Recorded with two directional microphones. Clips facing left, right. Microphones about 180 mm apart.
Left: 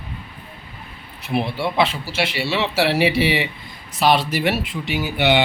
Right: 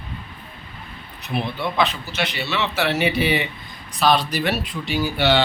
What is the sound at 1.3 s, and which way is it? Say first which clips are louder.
A man's voice: left 3 dB; 30° left (ahead or behind).